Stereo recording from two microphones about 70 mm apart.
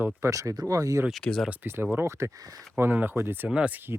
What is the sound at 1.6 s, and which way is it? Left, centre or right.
Speech, right.